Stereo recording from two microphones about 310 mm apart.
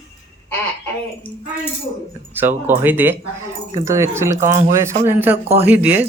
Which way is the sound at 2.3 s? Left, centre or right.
Centre.